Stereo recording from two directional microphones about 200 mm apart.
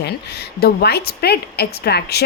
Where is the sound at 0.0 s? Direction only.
55° left (ahead or behind).